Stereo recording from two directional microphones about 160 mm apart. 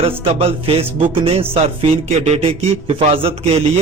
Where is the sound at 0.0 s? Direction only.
35° right (ahead or behind).